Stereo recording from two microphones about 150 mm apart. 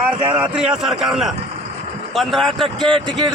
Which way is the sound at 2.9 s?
35° right (ahead or behind).